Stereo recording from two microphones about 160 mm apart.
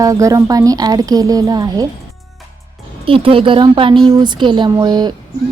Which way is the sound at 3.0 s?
35° right (ahead or behind).